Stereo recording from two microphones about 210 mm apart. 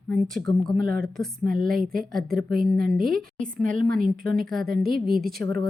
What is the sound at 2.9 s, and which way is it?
Speech, centre (ahead or behind).